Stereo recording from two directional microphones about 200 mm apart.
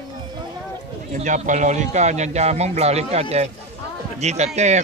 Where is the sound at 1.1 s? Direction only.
40° right (ahead or behind).